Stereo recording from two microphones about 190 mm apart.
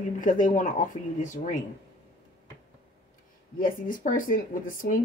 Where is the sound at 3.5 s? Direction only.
45° left (ahead or behind).